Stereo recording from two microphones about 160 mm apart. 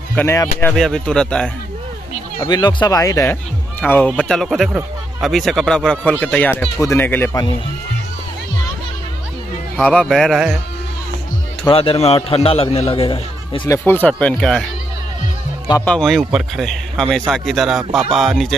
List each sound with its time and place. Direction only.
0.1 s a man's voice: 15° left (ahead or behind)
2.4 s speech: 25° left (ahead or behind)
3.8 s a man's voice: 10° left (ahead or behind)
9.8 s a man's voice: 5° left (ahead or behind)
11.7 s a man's voice: 35° left (ahead or behind)
13.7 s speech: 15° left (ahead or behind)
15.8 s a man's voice: 5° left (ahead or behind)